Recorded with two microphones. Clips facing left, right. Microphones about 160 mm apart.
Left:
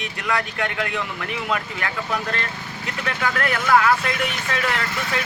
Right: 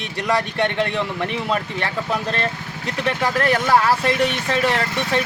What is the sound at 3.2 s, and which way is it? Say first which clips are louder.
Speech: right 4 dB; 35° right (ahead or behind).